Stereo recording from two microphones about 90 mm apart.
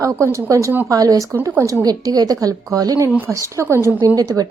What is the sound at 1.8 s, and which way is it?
A woman's voice, 45° right (ahead or behind).